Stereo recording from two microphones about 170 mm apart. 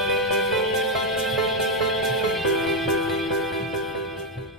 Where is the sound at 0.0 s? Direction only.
Centre (ahead or behind).